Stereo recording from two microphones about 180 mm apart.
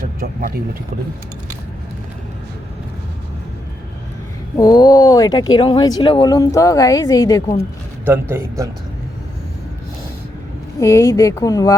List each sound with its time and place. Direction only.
0.0 s speech: 50° right (ahead or behind)
4.5 s speech: 20° left (ahead or behind)
8.0 s a man's voice: 15° right (ahead or behind)
10.8 s speech: 15° left (ahead or behind)